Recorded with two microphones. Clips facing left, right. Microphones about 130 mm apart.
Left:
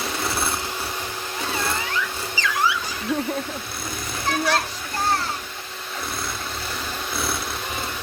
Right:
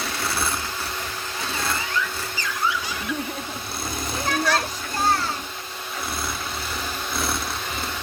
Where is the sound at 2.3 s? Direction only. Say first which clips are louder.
Left 4 dB; 90° left.